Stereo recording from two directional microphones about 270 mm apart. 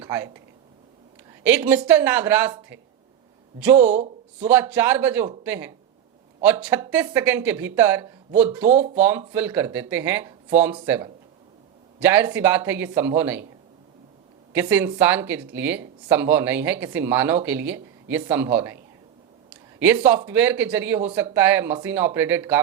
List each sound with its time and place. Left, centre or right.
0.0 s speech: centre
1.5 s speech: centre
3.8 s speech: right
4.4 s speech: centre
14.5 s speech: centre
19.8 s speech: centre